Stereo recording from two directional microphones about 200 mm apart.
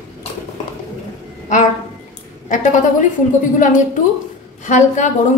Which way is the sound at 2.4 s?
40° left (ahead or behind).